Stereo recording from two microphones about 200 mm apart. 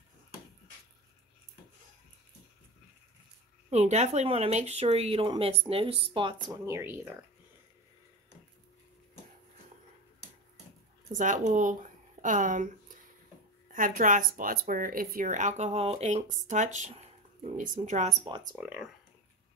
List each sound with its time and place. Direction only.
3.7 s speech: 35° right (ahead or behind); by 7.2 s 10° right (ahead or behind)
11.1 s speech: 40° right (ahead or behind)
18.6 s speech: 5° right (ahead or behind)